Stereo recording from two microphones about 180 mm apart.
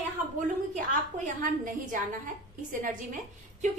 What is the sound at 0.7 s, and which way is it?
A woman's voice, 45° right (ahead or behind).